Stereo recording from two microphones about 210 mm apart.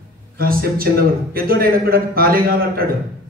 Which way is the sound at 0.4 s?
45° right (ahead or behind).